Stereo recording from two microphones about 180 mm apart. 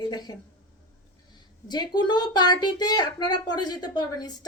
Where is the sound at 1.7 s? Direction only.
25° left (ahead or behind).